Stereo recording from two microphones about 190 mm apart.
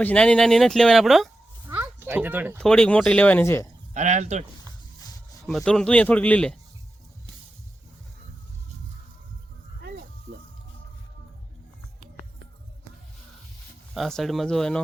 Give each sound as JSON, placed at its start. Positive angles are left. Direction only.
{"t": 0.0, "sound": "speech", "side_deg": 5}
{"t": 1.6, "sound": "a sound", "side_deg": -10}
{"t": 2.6, "sound": "speech", "side_deg": 5}
{"t": 3.9, "sound": "speech", "side_deg": -40}
{"t": 4.9, "sound": "rub", "side_deg": 20}
{"t": 5.5, "sound": "speech", "side_deg": 0}
{"t": 13.9, "sound": "speech", "side_deg": 0}